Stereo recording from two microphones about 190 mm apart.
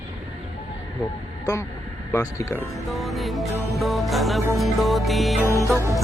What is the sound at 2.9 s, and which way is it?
Music, centre (ahead or behind).